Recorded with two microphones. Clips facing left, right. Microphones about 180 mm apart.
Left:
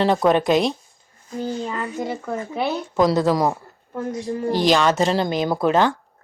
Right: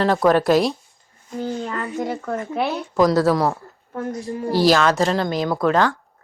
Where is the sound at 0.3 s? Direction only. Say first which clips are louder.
Right 3 dB; 20° left (ahead or behind).